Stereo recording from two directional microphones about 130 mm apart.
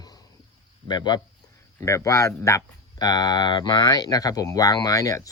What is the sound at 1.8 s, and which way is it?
Speech, 25° left (ahead or behind).